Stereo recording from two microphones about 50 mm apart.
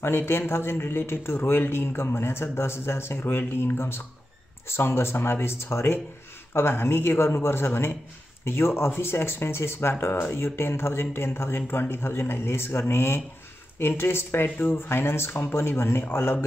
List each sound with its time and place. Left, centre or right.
0.0 s speech: left